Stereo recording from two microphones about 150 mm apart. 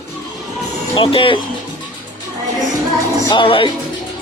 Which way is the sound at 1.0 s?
35° left (ahead or behind).